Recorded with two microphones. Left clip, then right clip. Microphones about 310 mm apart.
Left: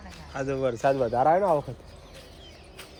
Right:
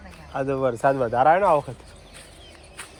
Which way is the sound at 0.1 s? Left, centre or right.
Centre.